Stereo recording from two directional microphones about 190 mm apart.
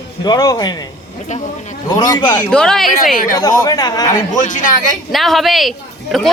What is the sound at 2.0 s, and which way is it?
Speech, 20° left (ahead or behind).